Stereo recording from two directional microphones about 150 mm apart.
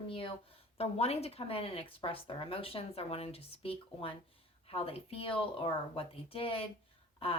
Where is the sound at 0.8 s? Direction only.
45° left (ahead or behind).